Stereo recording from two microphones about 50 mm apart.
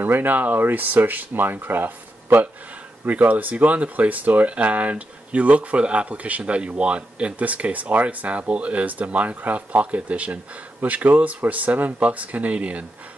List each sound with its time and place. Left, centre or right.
0.0 s speech: right
3.1 s speech: right